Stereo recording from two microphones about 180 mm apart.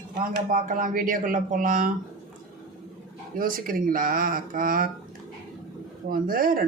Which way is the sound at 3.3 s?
50° right (ahead or behind).